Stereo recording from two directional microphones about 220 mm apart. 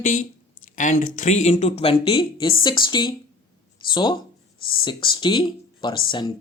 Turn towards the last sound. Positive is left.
turn(degrees=20)  # may be behind; listen again after turning